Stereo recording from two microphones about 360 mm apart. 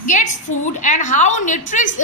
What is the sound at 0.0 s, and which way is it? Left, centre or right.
A woman's voice, left.